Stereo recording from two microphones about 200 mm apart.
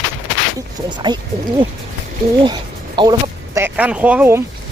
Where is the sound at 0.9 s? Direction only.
20° right (ahead or behind).